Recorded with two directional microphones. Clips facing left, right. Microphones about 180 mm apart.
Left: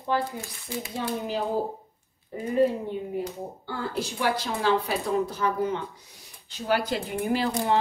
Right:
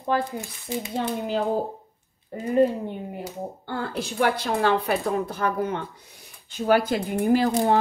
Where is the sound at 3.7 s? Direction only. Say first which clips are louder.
Even; 55° right (ahead or behind).